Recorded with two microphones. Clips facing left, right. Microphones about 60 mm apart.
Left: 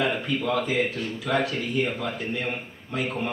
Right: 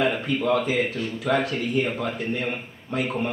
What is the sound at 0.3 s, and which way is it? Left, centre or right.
A man's voice, right.